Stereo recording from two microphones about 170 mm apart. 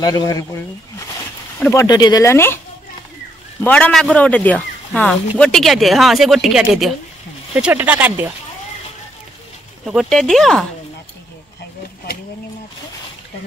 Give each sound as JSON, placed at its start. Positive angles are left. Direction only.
{"t": 0.0, "sound": "speech", "side_deg": 25}
{"t": 1.6, "sound": "speech", "side_deg": 20}
{"t": 3.6, "sound": "speech", "side_deg": 10}
{"t": 9.8, "sound": "speech", "side_deg": 0}